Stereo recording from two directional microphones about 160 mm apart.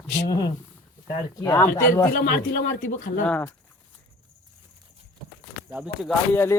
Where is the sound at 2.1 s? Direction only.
70° left (ahead or behind).